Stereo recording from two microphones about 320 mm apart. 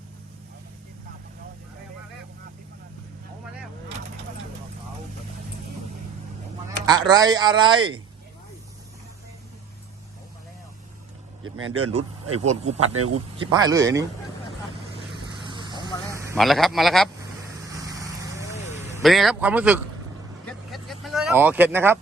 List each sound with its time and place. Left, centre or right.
6.8 s speech: centre
11.4 s speech: right
12.4 s speech: right
12.9 s speech: right
13.4 s speech: centre
15.4 s vehicle: centre
16.2 s a man's voice: centre
17.6 s vehicle: centre
18.9 s a man's voice: centre
20.5 s vehicle: centre